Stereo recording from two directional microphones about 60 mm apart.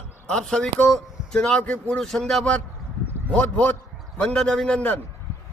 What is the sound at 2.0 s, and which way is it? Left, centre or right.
Speech, centre.